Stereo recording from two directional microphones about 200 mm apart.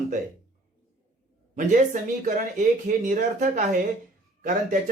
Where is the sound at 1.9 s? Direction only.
40° right (ahead or behind).